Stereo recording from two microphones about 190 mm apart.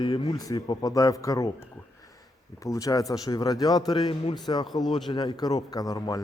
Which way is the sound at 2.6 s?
15° left (ahead or behind).